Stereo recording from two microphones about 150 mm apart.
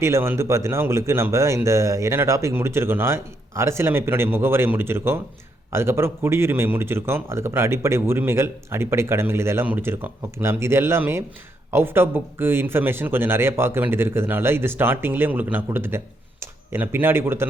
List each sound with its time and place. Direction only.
0.0 s speech: 15° right (ahead or behind)